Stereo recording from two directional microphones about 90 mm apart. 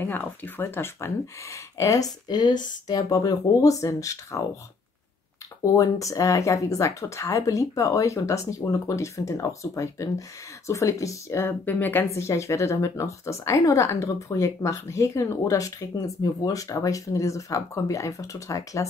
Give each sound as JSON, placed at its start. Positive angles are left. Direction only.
{"t": 0.0, "sound": "speech", "side_deg": 20}
{"t": 1.8, "sound": "speech", "side_deg": 40}
{"t": 5.8, "sound": "speech", "side_deg": 40}
{"t": 11.6, "sound": "speech", "side_deg": 20}